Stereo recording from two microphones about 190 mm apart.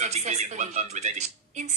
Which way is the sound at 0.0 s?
35° right (ahead or behind).